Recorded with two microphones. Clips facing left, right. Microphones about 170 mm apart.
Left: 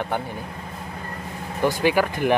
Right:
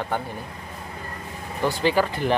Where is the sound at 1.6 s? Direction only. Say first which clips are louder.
Left 1 dB; 15° left (ahead or behind).